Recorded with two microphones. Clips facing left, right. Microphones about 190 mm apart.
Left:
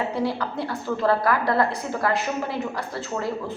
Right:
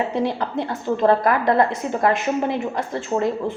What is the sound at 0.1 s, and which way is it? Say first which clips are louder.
A woman's voice: right 3 dB; 20° right (ahead or behind).